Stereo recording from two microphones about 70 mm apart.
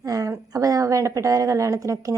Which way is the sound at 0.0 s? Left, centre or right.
Right.